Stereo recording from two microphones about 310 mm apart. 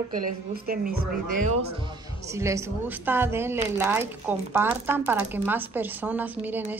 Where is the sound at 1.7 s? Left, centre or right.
Centre.